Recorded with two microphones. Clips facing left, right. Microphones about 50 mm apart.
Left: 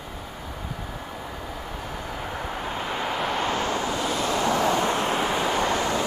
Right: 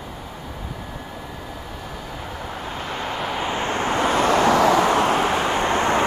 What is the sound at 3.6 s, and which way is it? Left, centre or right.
Vehicle, right.